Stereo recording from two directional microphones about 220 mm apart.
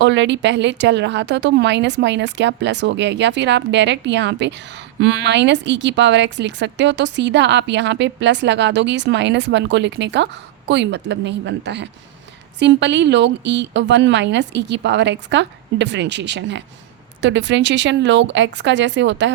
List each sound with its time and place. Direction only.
0.0 s speech: 55° right (ahead or behind)